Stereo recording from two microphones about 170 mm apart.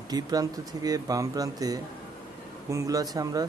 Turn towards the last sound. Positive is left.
turn(degrees=-20)  # may be behind; listen again after turning